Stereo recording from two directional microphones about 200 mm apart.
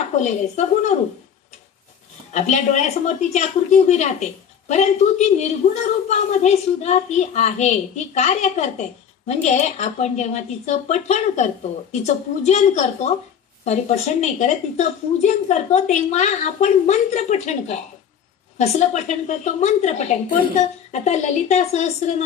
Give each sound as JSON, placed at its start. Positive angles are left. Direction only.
{"t": 0.1, "sound": "a woman's voice", "side_deg": 35}
{"t": 2.3, "sound": "a woman's voice", "side_deg": 35}